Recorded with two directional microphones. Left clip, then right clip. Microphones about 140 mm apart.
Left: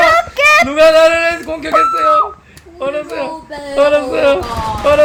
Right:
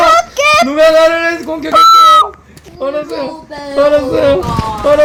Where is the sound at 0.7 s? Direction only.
30° right (ahead or behind).